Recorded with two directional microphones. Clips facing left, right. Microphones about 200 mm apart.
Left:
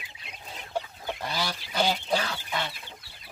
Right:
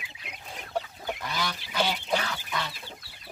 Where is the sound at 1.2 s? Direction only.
30° left (ahead or behind).